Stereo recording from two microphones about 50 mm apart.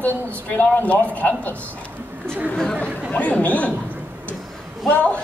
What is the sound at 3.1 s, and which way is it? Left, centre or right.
Speech, left.